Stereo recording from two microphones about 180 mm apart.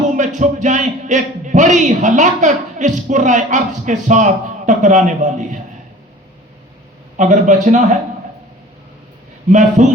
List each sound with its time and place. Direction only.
0.3 s a man's voice: 40° right (ahead or behind)
7.2 s a man's voice: 45° right (ahead or behind)
9.5 s a man's voice: 40° right (ahead or behind)